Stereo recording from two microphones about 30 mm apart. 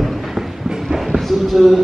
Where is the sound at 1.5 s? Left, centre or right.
Centre.